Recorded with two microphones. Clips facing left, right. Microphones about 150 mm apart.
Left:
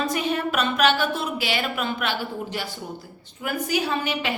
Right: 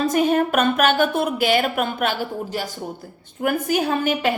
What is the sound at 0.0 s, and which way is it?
A woman's voice, 45° right (ahead or behind).